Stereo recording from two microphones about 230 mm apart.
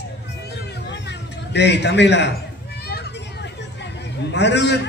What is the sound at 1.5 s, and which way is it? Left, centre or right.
Speech, left.